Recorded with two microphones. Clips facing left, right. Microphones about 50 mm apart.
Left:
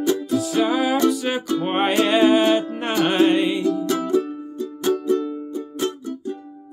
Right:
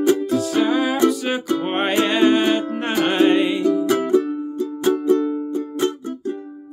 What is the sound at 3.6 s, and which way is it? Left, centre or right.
Music, centre.